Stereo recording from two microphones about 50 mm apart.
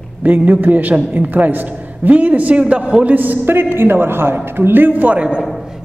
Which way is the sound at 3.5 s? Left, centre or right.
Right.